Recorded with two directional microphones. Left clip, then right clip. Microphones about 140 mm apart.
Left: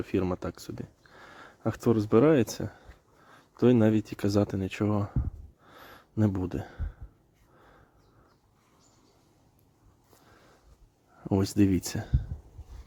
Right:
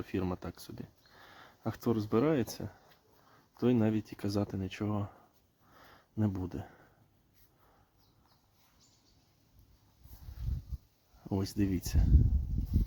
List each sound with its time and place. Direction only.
0.0 s speech: 25° left (ahead or behind)
5.7 s a sound: 35° left (ahead or behind)
11.2 s speech: 35° left (ahead or behind)